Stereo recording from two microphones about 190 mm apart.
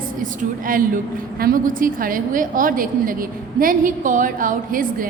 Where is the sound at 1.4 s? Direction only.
50° right (ahead or behind).